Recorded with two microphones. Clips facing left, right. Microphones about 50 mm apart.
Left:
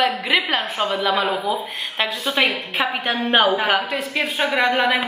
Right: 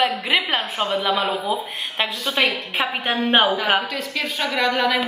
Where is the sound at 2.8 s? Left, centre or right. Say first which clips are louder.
Even; centre.